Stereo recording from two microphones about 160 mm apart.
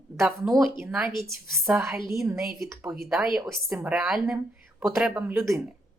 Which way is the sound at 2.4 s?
Centre (ahead or behind).